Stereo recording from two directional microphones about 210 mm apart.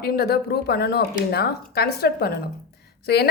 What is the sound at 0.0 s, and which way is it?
A woman's voice, 45° left (ahead or behind).